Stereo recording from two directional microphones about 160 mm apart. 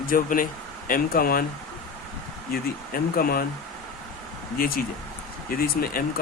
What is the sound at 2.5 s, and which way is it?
Speech, 65° left (ahead or behind).